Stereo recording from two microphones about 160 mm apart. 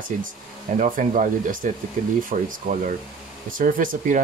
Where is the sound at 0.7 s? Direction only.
55° right (ahead or behind).